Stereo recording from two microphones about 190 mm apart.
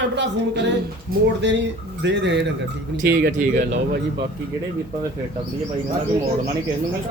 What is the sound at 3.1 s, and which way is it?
Speech, 55° right (ahead or behind).